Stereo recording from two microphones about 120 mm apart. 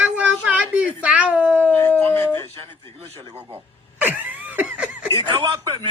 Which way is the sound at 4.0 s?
15° right (ahead or behind).